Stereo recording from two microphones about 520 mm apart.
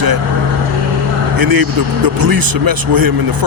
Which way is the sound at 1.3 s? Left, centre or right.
Right.